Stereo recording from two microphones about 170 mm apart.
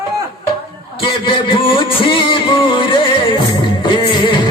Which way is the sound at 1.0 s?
30° left (ahead or behind).